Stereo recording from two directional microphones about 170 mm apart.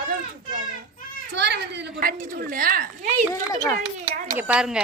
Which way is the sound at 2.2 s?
55° right (ahead or behind).